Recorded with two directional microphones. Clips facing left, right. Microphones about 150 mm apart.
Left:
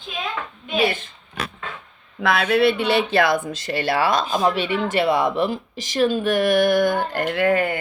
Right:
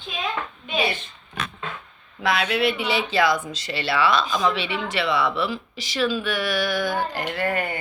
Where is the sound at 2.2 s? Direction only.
55° left (ahead or behind).